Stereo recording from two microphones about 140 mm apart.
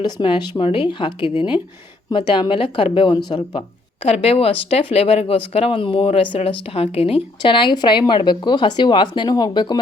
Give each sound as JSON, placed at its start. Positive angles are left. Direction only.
{"t": 0.0, "sound": "a woman's voice", "side_deg": 35}
{"t": 4.0, "sound": "a woman's voice", "side_deg": 45}